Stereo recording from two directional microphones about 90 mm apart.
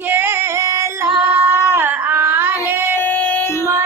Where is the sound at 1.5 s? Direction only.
25° right (ahead or behind).